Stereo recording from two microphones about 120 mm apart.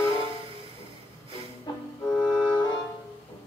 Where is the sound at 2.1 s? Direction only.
5° left (ahead or behind).